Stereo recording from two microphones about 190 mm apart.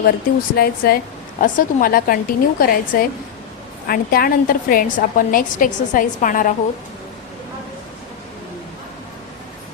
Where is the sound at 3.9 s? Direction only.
50° left (ahead or behind).